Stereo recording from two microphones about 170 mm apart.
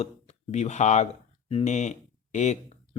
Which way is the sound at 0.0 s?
40° left (ahead or behind).